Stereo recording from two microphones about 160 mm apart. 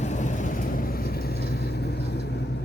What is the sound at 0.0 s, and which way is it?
Vehicle, 50° left (ahead or behind).